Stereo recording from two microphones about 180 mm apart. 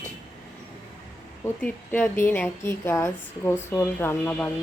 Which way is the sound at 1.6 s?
10° left (ahead or behind).